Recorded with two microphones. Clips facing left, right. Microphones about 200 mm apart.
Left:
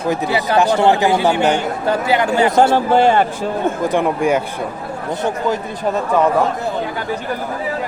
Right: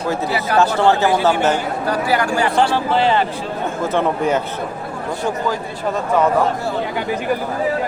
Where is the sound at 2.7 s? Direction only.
50° left (ahead or behind).